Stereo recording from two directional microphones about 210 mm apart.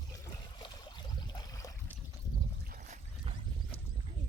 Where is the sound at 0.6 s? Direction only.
20° left (ahead or behind).